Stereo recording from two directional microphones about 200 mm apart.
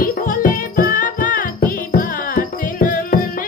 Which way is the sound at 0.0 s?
45° left (ahead or behind).